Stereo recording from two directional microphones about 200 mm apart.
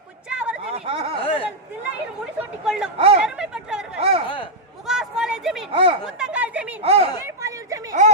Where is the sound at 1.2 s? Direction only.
30° left (ahead or behind).